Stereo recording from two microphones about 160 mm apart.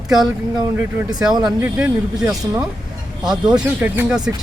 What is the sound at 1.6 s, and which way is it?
A man's voice, 10° right (ahead or behind).